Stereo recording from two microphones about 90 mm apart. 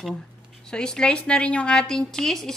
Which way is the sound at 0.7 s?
10° left (ahead or behind).